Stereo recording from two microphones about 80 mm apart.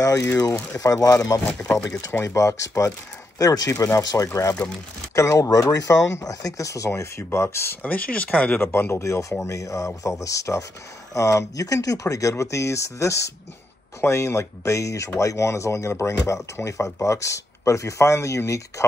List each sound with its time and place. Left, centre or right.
0.0 s speech: left
7.8 s speech: centre; by 18.9 s left